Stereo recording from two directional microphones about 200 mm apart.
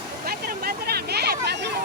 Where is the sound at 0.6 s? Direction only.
55° right (ahead or behind).